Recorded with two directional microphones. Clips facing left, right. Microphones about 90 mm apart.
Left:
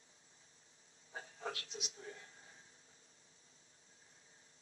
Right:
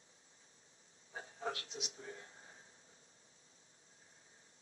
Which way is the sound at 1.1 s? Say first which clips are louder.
Right 3 dB; 30° right (ahead or behind).